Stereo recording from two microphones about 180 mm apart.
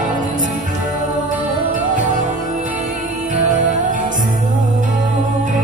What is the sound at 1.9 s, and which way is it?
Music, 45° right (ahead or behind).